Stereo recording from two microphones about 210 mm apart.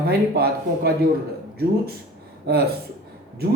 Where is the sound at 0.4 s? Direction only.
50° right (ahead or behind).